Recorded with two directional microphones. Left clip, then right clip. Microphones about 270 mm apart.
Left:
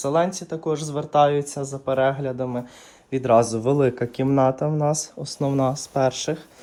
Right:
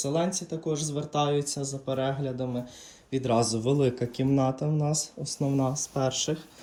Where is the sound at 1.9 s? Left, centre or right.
Left.